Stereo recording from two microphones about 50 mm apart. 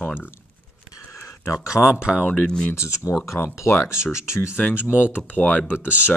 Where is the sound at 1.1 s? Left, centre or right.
Left.